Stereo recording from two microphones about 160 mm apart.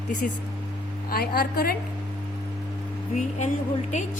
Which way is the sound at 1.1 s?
70° left (ahead or behind).